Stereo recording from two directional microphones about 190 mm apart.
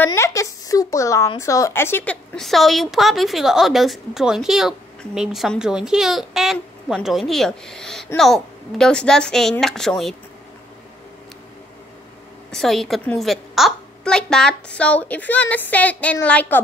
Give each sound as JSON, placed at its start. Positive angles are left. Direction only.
{"t": 0.0, "sound": "a woman's voice", "side_deg": 15}
{"t": 12.4, "sound": "a woman's voice", "side_deg": 0}